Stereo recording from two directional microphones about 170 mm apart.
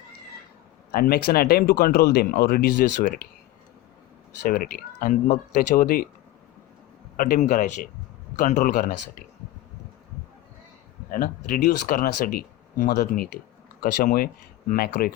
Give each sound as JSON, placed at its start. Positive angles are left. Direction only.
{"t": 0.9, "sound": "speech", "side_deg": 65}
{"t": 4.4, "sound": "speech", "side_deg": 55}
{"t": 7.2, "sound": "a man's voice", "side_deg": 50}
{"t": 11.1, "sound": "speech", "side_deg": 55}